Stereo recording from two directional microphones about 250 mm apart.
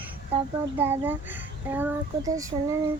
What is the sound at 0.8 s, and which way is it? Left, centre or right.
A child's voice, centre.